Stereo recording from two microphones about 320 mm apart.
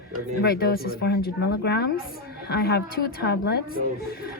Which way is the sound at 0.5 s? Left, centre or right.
Left.